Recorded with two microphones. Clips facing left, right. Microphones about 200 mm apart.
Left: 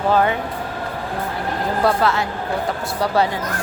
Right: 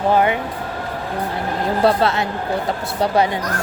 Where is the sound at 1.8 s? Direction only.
25° right (ahead or behind).